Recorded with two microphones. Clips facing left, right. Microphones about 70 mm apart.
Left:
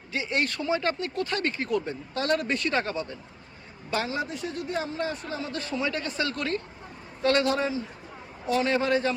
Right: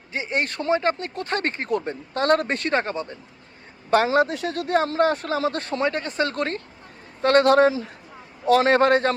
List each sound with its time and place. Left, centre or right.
0.1 s speech: right
3.8 s speech: right
5.5 s speech: right
6.0 s speech: right